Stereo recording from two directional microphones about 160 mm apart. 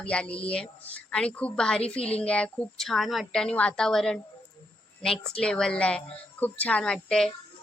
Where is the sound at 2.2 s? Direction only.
5° left (ahead or behind).